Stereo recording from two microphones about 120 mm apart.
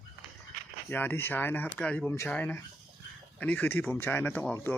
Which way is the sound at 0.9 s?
20° left (ahead or behind).